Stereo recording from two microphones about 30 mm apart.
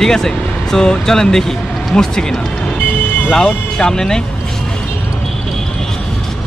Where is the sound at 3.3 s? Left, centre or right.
Left.